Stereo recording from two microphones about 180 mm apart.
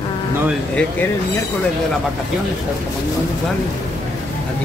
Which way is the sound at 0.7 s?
10° left (ahead or behind).